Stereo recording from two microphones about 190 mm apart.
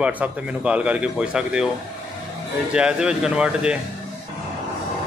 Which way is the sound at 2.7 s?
5° right (ahead or behind).